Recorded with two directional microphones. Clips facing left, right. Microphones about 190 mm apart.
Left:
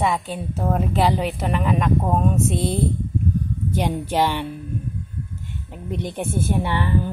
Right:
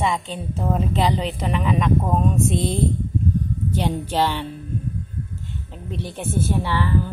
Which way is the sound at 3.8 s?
15° left (ahead or behind).